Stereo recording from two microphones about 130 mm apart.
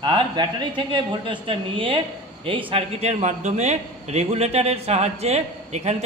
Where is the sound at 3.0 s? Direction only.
65° right (ahead or behind).